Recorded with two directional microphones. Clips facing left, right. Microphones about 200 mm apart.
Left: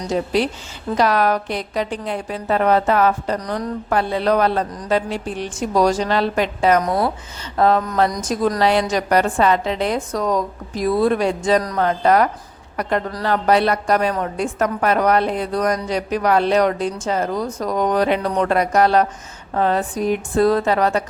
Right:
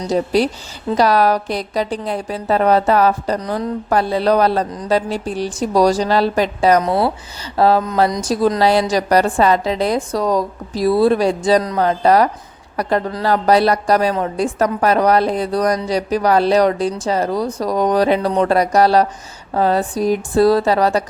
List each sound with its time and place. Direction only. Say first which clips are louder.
0.1 s a woman's voice: right 3 dB; 35° right (ahead or behind)